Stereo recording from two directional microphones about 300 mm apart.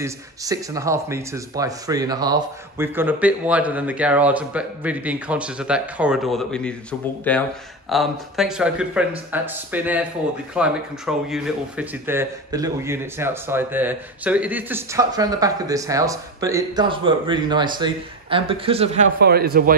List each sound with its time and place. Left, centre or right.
0.0 s a man's voice: centre; by 19.8 s right